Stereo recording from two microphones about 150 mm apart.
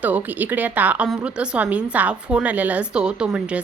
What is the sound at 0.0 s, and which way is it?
A woman's voice, 10° right (ahead or behind).